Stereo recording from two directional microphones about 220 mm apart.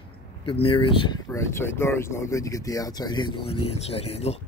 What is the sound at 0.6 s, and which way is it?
Speech, 25° left (ahead or behind).